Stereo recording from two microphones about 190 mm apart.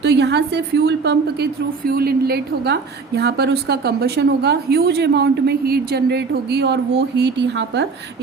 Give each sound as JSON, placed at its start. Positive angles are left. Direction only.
{"t": 0.0, "sound": "a woman's voice", "side_deg": -65}